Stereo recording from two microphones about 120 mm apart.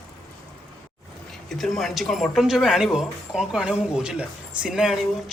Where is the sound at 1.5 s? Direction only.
Centre (ahead or behind).